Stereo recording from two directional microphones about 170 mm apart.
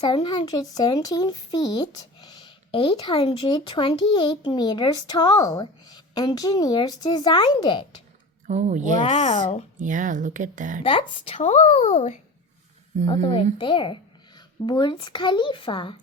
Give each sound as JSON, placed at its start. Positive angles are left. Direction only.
{"t": 0.0, "sound": "speech", "side_deg": 25}
{"t": 8.4, "sound": "speech", "side_deg": -45}
{"t": 9.0, "sound": "speech", "side_deg": 45}
{"t": 9.7, "sound": "speech", "side_deg": -50}
{"t": 10.8, "sound": "a woman's voice", "side_deg": 30}
{"t": 11.4, "sound": "speech", "side_deg": 45}
{"t": 13.2, "sound": "speech", "side_deg": 25}